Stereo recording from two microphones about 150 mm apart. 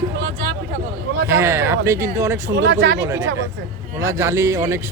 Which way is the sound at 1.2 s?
15° right (ahead or behind).